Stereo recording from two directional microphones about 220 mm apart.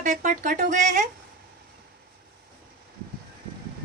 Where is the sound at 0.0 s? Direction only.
35° right (ahead or behind).